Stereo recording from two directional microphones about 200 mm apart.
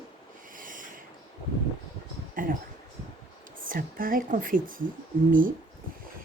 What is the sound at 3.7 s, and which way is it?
Speech, 45° right (ahead or behind).